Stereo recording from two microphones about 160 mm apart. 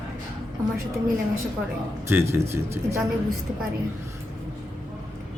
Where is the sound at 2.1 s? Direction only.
15° right (ahead or behind).